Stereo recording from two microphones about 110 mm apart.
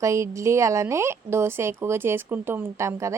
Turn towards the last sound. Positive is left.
turn(degrees=-25)  # may be behind; listen again after turning